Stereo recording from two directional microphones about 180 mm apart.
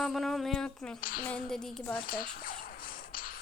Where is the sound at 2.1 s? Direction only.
55° left (ahead or behind).